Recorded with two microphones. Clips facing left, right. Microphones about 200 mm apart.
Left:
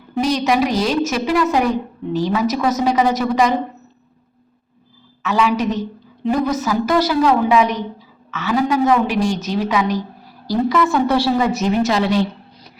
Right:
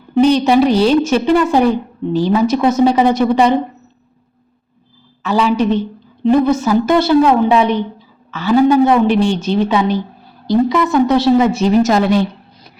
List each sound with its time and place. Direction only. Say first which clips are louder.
0.1 s a woman's voice: right 7 dB; 30° right (ahead or behind)
5.2 s a woman's voice: right 3 dB; 30° right (ahead or behind)
11.8 s a woman's voice: right 4 dB; 45° right (ahead or behind)